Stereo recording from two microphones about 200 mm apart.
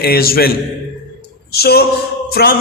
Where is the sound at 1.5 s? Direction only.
50° left (ahead or behind).